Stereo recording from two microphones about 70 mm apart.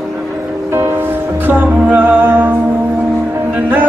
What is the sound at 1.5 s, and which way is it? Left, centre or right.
Humming, right.